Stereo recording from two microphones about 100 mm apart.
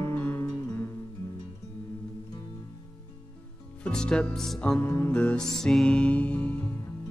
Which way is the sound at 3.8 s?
5° left (ahead or behind).